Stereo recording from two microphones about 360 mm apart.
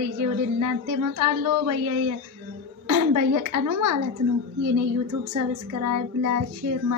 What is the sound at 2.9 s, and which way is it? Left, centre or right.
A woman's voice, right.